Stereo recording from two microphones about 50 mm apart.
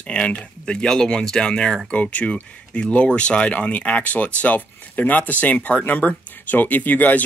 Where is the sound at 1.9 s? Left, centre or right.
Left.